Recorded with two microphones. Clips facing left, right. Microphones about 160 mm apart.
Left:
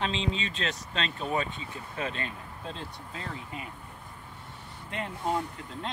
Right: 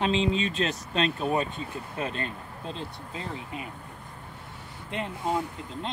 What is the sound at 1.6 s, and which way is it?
Speech, 45° right (ahead or behind).